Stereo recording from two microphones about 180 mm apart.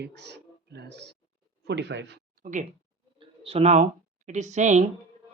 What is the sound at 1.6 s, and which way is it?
Speech, 80° right.